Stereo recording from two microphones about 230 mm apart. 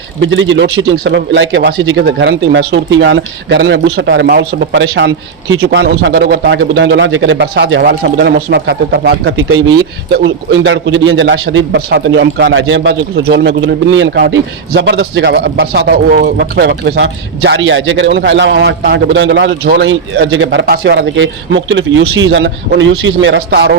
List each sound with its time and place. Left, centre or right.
0.2 s a man's voice: right